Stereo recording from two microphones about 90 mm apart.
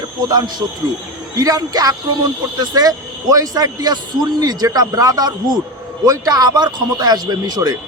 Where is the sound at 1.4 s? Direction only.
45° right (ahead or behind).